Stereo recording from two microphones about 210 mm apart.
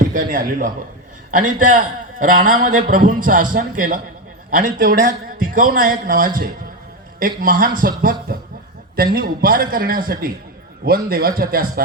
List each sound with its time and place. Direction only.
0.0 s a man's voice: 40° right (ahead or behind)